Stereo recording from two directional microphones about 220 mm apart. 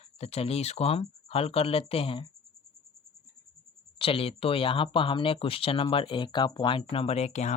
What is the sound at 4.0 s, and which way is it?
Speech, 25° left (ahead or behind).